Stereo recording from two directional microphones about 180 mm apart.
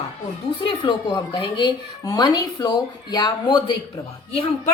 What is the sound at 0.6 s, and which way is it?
A woman's voice, 25° left (ahead or behind).